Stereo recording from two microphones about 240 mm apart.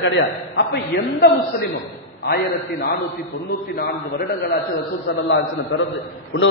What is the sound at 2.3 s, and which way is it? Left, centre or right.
Speech, left.